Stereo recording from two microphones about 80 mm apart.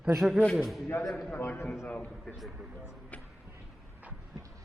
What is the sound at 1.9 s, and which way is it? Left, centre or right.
Speech, centre.